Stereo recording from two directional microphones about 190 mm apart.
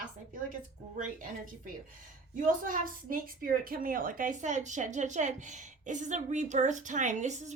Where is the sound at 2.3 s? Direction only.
45° right (ahead or behind).